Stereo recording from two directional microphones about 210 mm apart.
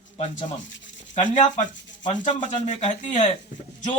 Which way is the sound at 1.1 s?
35° left (ahead or behind).